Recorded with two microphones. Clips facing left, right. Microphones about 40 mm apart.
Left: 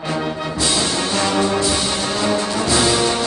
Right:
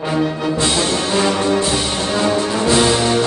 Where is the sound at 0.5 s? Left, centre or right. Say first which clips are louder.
Even; right.